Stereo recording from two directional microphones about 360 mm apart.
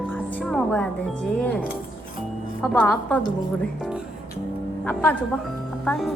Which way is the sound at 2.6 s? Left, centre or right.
Centre.